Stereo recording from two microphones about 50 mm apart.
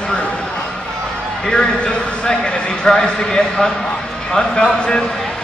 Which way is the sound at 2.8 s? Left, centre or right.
Centre.